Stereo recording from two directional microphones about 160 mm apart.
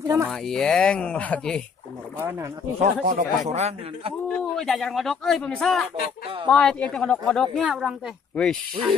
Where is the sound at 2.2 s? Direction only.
15° right (ahead or behind).